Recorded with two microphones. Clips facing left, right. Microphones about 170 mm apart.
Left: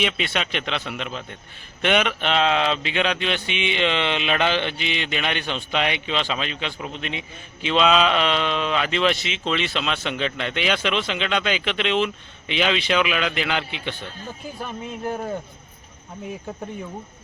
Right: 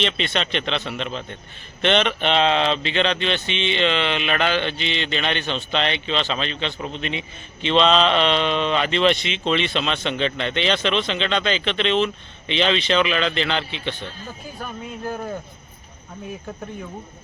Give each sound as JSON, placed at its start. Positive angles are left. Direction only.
{"t": 0.0, "sound": "speech", "side_deg": 10}